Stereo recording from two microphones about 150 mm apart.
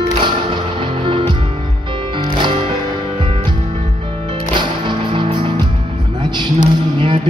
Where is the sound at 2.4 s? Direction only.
35° right (ahead or behind).